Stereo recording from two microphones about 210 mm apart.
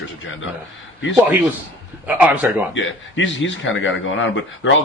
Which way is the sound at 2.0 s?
5° right (ahead or behind).